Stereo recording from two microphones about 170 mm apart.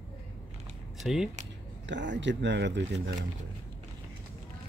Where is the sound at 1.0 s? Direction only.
Centre (ahead or behind).